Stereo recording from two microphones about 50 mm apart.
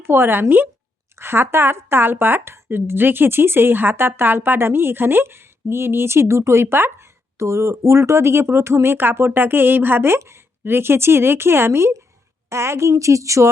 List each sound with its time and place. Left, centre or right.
0.0 s speech: right
1.2 s speech: right
7.3 s speech: right
10.2 s speech: right
10.6 s a woman's voice: right